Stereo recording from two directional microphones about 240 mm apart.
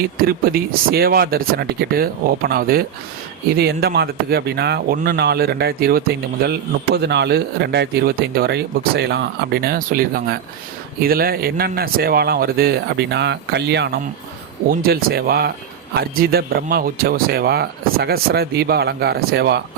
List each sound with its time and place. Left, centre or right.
0.3 s speech: right